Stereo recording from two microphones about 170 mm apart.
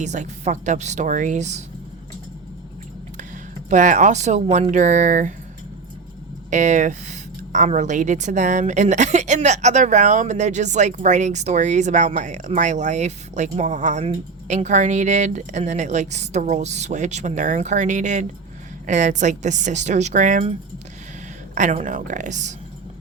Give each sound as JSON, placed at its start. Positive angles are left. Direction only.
{"t": 0.0, "sound": "speech", "side_deg": -45}
{"t": 3.7, "sound": "speech", "side_deg": -50}
{"t": 6.5, "sound": "speech", "side_deg": -45}
{"t": 21.5, "sound": "speech", "side_deg": -50}